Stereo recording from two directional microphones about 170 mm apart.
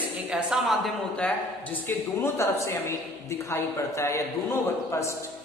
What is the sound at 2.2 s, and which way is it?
A man's voice, 15° left (ahead or behind).